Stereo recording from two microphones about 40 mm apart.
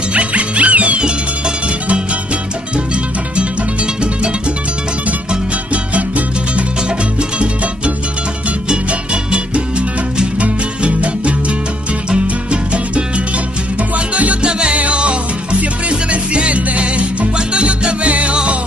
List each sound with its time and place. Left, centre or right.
0.1 s music: right
3.3 s music: right
5.3 s music: right
8.6 s music: right